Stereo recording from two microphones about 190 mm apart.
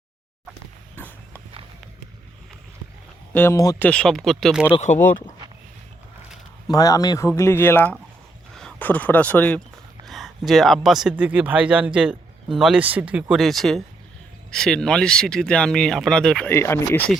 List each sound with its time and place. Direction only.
3.3 s speech: 15° left (ahead or behind)
3.8 s speech: 5° left (ahead or behind)
6.7 s speech: 20° left (ahead or behind)